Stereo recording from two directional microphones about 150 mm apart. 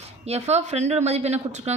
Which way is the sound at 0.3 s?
45° right (ahead or behind).